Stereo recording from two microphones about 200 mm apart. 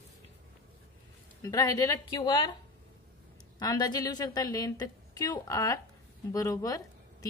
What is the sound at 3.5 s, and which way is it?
A woman's voice, 20° left (ahead or behind).